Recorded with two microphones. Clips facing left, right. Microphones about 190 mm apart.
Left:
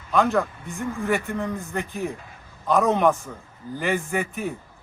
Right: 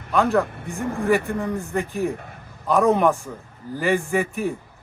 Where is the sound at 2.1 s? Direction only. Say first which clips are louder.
Right 5 dB; 60° right (ahead or behind).